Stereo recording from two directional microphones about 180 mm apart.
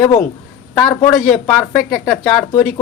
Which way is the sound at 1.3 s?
5° left (ahead or behind).